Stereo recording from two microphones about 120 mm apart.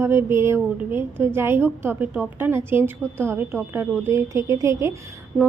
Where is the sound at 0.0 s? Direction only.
20° right (ahead or behind).